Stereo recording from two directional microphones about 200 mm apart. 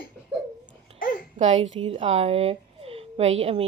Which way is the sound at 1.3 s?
35° right (ahead or behind).